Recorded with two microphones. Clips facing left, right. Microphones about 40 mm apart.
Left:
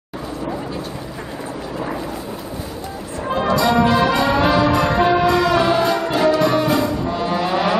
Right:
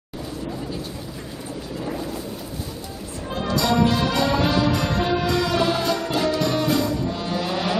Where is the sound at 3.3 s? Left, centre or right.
Centre.